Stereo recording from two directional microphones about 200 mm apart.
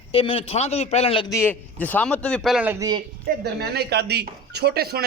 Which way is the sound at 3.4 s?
55° right (ahead or behind).